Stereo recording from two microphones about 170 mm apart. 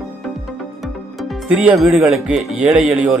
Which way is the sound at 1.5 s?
10° right (ahead or behind).